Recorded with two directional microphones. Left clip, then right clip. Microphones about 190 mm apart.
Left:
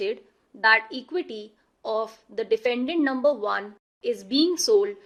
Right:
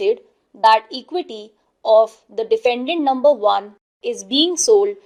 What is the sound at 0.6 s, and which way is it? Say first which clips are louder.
A woman's voice: right 6 dB; 20° right (ahead or behind).